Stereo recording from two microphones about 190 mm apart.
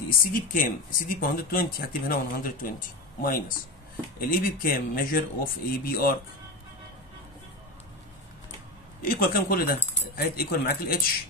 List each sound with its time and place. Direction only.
0.3 s speech: 45° left (ahead or behind)
9.0 s speech: 50° left (ahead or behind)